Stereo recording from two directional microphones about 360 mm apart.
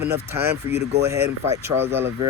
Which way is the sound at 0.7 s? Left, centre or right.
Right.